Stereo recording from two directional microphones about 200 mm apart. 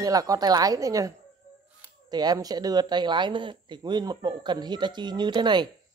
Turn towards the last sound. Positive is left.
turn(degrees=-20)  # may be behind; listen again after turning